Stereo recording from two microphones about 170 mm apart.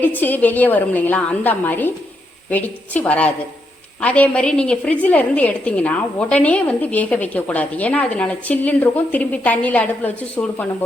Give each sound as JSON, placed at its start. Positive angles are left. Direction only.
{"t": 0.0, "sound": "a woman's voice", "side_deg": 10}